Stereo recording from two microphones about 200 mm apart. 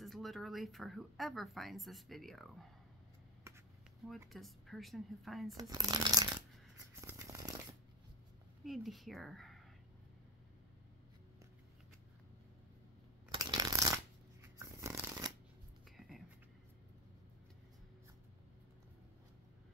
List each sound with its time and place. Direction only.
0.0 s speech: centre (ahead or behind)
4.3 s speech: centre (ahead or behind)
5.6 s speech: 20° right (ahead or behind)
7.0 s a sound: 15° right (ahead or behind)
8.6 s speech: centre (ahead or behind)
13.3 s shuffling cards: 20° right (ahead or behind)
14.6 s a sound: 15° right (ahead or behind)
16.0 s writing: centre (ahead or behind)